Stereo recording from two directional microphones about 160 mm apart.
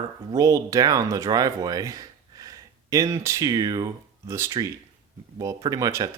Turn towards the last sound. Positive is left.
turn(degrees=-20)  # may be behind; listen again after turning